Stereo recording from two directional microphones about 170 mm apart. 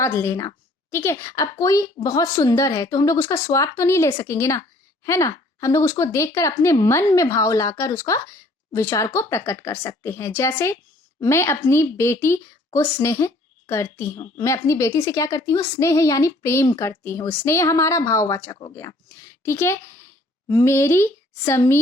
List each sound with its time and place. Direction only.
0.0 s a woman's voice: 15° left (ahead or behind)